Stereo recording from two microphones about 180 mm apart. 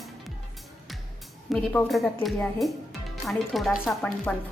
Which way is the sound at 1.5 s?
Centre (ahead or behind).